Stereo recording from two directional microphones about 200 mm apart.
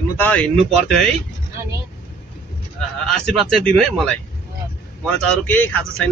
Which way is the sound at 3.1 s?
Centre (ahead or behind).